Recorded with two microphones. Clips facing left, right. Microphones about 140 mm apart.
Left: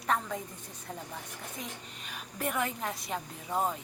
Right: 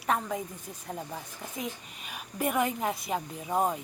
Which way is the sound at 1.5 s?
10° right (ahead or behind).